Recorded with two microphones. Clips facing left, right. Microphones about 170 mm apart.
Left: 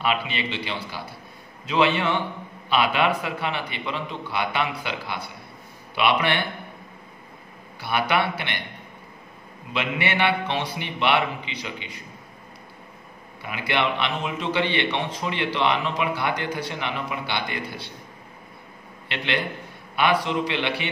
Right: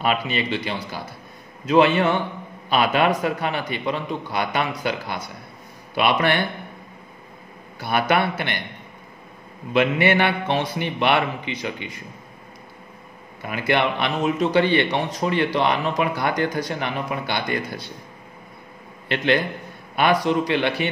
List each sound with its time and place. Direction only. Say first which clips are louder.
0.0 s a man's voice: right 3 dB; 45° right (ahead or behind)
7.8 s a man's voice: right 3 dB; 45° right (ahead or behind)
9.7 s a man's voice: right 8 dB; 45° right (ahead or behind)
13.4 s a man's voice: right 4 dB; 45° right (ahead or behind)
19.0 s a man's voice: right 7 dB; 45° right (ahead or behind)